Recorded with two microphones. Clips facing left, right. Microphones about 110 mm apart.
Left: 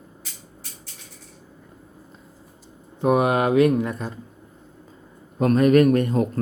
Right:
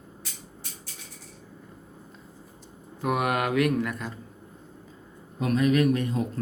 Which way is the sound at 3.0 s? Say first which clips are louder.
Left 7 dB; 25° left (ahead or behind).